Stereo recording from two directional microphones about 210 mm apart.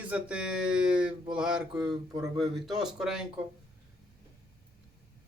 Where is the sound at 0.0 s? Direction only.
5° right (ahead or behind).